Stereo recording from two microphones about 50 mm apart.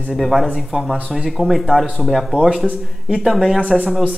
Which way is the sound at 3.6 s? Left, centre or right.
Right.